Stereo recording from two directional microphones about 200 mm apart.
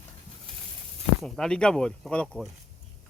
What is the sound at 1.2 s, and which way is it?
Speech, 5° left (ahead or behind).